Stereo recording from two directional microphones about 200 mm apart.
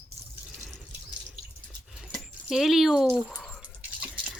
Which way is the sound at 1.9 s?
5° right (ahead or behind).